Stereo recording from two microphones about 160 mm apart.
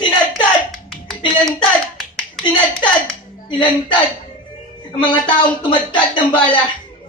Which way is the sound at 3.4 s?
30° left (ahead or behind).